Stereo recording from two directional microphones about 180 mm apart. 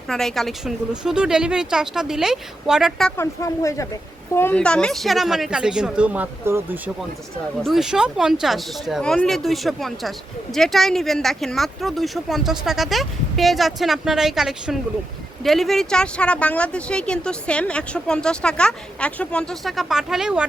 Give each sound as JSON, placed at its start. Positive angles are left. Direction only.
{"t": 0.1, "sound": "speech", "side_deg": 0}
{"t": 3.2, "sound": "speech", "side_deg": 15}
{"t": 7.6, "sound": "speech", "side_deg": 0}